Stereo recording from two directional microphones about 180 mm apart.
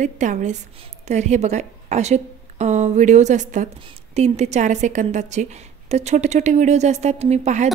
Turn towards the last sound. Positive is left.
turn(degrees=-40)  # may be behind; listen again after turning